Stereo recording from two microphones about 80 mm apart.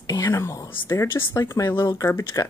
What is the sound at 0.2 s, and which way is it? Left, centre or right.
A woman's voice, left.